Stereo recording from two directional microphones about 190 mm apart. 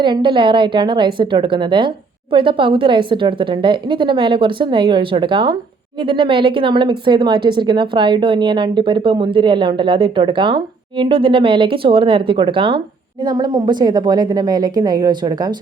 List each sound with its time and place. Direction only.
0.0 s a woman's voice: 25° right (ahead or behind)